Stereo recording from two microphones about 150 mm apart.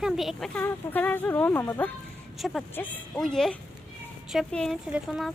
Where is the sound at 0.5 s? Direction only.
10° left (ahead or behind).